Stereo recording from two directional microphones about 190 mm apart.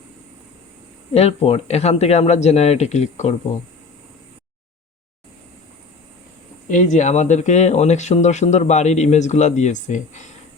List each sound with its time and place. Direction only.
1.1 s speech: 30° left (ahead or behind)
6.7 s speech: 40° left (ahead or behind)